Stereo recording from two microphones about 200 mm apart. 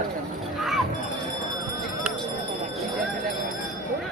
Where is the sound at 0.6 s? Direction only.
Centre (ahead or behind).